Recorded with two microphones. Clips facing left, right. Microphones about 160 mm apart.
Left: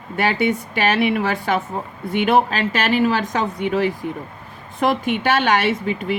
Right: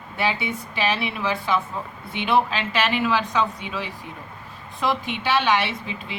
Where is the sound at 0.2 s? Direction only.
50° left (ahead or behind).